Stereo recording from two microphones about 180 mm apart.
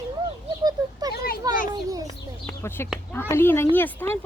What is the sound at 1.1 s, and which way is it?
Children playing, 55° left (ahead or behind).